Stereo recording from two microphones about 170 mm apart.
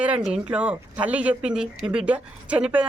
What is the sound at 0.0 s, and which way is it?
Speech, 5° right (ahead or behind).